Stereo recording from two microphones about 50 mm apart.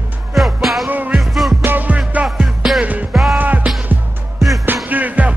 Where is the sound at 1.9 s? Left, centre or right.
Right.